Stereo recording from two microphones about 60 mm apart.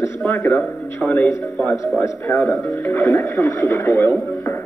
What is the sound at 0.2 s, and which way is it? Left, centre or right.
A man's voice, left.